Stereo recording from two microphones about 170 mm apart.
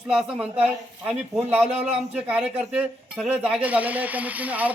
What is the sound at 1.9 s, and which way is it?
Speech, 10° right (ahead or behind).